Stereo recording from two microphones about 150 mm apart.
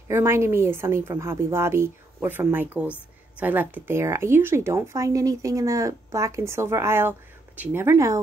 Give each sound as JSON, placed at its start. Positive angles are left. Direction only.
{"t": 0.1, "sound": "speech", "side_deg": -15}